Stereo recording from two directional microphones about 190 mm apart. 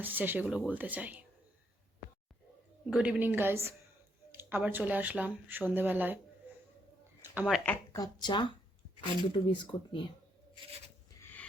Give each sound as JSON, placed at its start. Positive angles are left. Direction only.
{"t": 0.0, "sound": "speech", "side_deg": -10}
{"t": 2.9, "sound": "speech", "side_deg": -5}
{"t": 7.2, "sound": "speech", "side_deg": -5}
{"t": 7.9, "sound": "speech", "side_deg": 20}
{"t": 11.2, "sound": "a sound", "side_deg": 10}